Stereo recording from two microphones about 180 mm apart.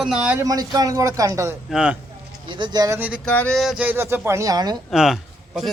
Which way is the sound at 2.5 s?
25° right (ahead or behind).